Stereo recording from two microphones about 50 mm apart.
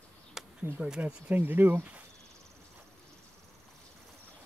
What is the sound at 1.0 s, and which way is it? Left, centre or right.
Speech, right.